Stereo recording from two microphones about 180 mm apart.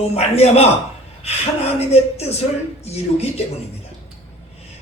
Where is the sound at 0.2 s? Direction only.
35° left (ahead or behind).